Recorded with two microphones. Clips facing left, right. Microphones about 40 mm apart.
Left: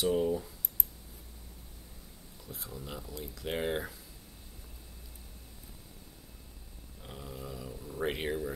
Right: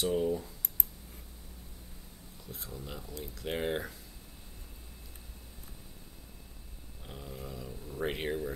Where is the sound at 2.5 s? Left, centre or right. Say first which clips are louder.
Left 1 dB; centre.